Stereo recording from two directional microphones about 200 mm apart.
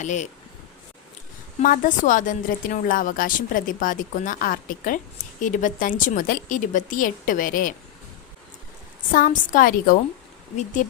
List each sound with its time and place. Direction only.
0.0 s a woman's voice: 35° left (ahead or behind)
1.6 s a woman's voice: 40° left (ahead or behind)
9.1 s a woman's voice: 40° left (ahead or behind)